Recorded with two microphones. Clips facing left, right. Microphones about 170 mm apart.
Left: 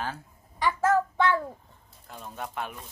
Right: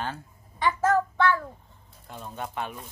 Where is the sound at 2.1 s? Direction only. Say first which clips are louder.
Right 2 dB; centre (ahead or behind).